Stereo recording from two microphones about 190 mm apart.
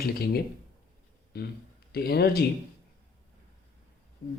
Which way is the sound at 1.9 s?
55° left (ahead or behind).